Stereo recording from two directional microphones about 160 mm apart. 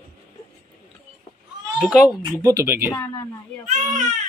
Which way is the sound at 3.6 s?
50° right (ahead or behind).